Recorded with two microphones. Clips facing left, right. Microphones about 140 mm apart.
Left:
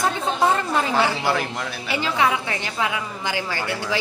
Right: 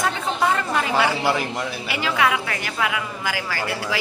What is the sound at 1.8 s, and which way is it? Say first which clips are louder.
A woman's voice: left 1 dB; 30° left (ahead or behind).